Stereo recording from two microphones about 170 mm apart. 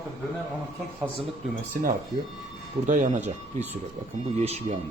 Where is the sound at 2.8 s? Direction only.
45° right (ahead or behind).